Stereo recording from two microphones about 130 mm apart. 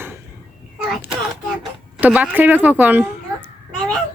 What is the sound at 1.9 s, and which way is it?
A child's voice, 10° right (ahead or behind).